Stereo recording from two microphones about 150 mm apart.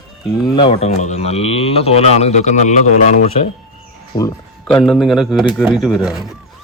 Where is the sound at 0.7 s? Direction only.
50° left (ahead or behind).